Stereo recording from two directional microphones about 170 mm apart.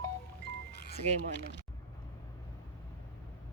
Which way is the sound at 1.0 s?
40° right (ahead or behind).